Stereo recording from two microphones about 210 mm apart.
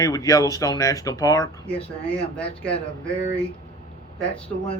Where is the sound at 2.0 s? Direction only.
5° left (ahead or behind).